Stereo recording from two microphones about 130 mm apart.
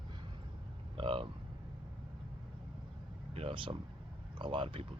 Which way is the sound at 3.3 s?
45° right (ahead or behind).